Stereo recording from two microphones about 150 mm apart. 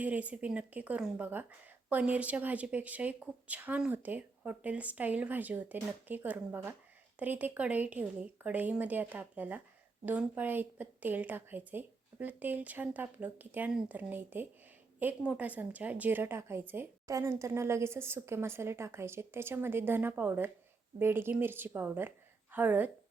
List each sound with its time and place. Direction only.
0.0 s a woman's voice: 10° right (ahead or behind)